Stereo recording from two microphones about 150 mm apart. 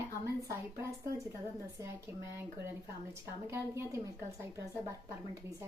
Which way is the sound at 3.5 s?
20° right (ahead or behind).